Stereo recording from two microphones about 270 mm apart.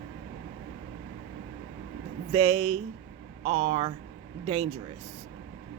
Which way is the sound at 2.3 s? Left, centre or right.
Right.